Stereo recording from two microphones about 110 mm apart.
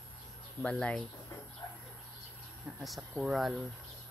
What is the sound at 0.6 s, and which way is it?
Speech, 10° left (ahead or behind).